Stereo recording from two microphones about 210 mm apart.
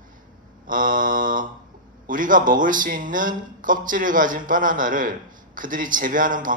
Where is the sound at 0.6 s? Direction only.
40° right (ahead or behind).